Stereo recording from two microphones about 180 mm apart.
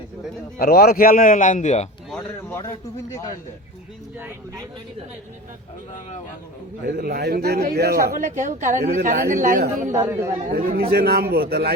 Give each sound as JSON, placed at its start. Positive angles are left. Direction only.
{"t": 0.6, "sound": "a man's voice", "side_deg": 60}
{"t": 2.5, "sound": "a man's voice", "side_deg": 15}
{"t": 6.8, "sound": "a man's voice", "side_deg": -55}
{"t": 9.9, "sound": "speech", "side_deg": -15}
{"t": 10.5, "sound": "a man's voice", "side_deg": -55}